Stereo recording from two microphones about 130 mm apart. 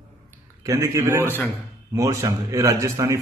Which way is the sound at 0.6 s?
25° right (ahead or behind).